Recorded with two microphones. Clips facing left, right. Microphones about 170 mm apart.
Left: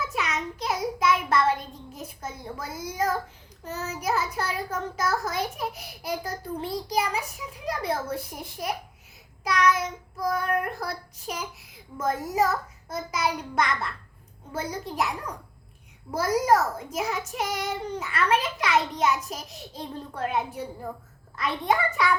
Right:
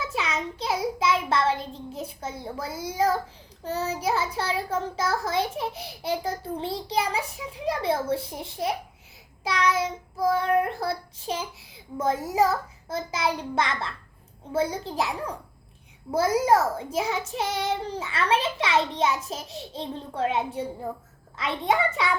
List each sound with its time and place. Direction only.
0.0 s child singing: 30° right (ahead or behind)
3.6 s a child's voice: 30° right (ahead or behind)